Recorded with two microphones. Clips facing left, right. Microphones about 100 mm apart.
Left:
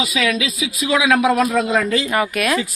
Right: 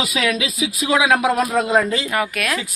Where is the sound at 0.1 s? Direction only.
45° right (ahead or behind).